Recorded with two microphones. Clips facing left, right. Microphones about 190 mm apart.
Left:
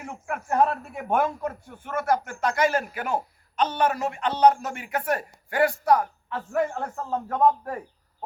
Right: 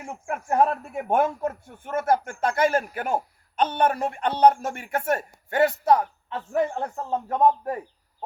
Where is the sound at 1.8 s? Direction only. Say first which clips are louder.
Right 2 dB; 45° right (ahead or behind).